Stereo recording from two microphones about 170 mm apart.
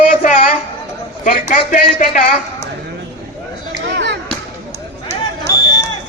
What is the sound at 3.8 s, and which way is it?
Chop, 80° right.